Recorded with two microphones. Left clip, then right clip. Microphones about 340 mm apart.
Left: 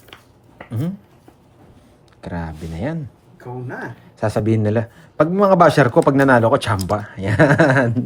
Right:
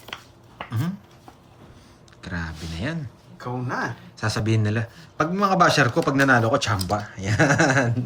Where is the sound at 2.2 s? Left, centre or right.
Centre.